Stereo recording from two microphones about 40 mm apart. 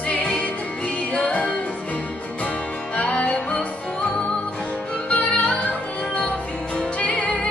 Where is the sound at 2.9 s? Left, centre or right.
Left.